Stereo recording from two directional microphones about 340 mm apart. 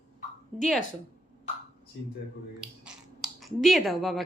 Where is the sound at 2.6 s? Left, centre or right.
Centre.